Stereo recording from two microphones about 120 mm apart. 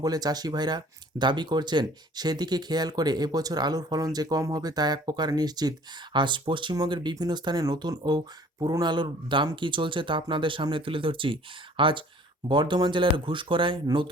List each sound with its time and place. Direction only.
0.0 s speech: 35° right (ahead or behind)